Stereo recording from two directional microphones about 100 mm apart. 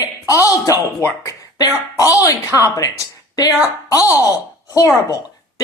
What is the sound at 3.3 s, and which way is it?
Speech, 40° left (ahead or behind).